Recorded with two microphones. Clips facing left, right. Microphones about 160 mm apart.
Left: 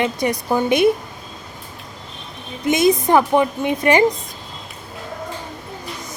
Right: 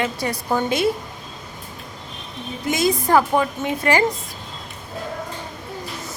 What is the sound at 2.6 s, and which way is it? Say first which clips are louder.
Speech: left 5 dB; 20° left (ahead or behind).